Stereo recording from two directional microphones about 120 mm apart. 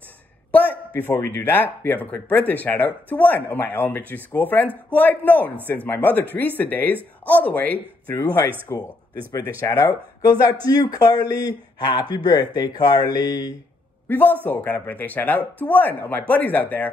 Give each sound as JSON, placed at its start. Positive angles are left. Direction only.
{"t": 0.5, "sound": "a sound", "side_deg": 15}
{"t": 1.2, "sound": "speech", "side_deg": 20}
{"t": 8.7, "sound": "speech", "side_deg": 25}
{"t": 14.0, "sound": "speech", "side_deg": 15}